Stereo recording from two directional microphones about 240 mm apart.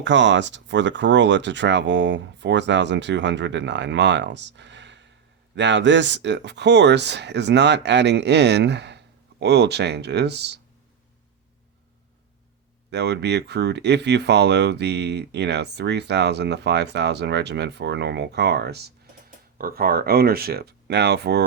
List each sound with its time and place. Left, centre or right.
0.0 s speech: right
12.9 s speech: right